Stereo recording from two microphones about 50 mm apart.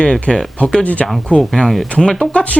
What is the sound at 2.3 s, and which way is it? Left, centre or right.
Speech, left.